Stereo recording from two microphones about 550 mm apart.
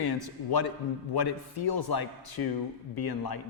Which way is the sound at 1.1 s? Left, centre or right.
Left.